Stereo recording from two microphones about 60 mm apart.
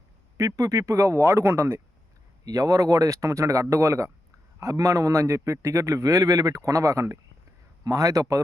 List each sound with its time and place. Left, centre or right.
0.3 s a man's voice: right
2.4 s a man's voice: right
4.6 s a man's voice: right
7.9 s a man's voice: right